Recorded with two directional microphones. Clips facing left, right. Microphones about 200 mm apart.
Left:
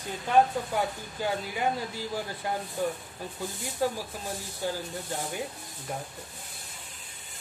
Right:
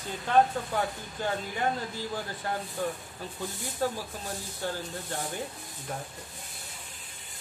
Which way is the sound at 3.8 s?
10° left (ahead or behind).